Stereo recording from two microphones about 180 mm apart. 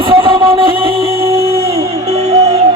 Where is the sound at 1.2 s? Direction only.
15° right (ahead or behind).